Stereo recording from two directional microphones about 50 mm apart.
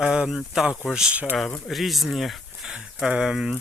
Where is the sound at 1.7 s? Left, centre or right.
Centre.